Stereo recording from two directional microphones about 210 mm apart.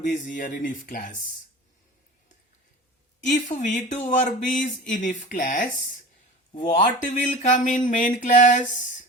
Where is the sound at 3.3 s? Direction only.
35° left (ahead or behind).